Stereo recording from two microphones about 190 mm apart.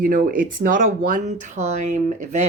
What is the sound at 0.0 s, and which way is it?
Speech, 50° right (ahead or behind).